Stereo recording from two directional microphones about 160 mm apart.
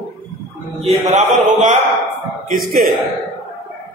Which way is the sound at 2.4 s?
60° right (ahead or behind).